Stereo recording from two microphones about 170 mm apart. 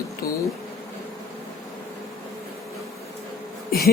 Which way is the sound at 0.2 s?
60° left (ahead or behind).